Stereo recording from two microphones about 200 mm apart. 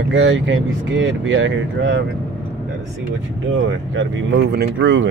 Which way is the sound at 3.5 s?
70° right (ahead or behind).